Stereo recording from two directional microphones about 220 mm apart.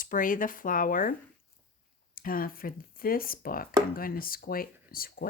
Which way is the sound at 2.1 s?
40° left (ahead or behind).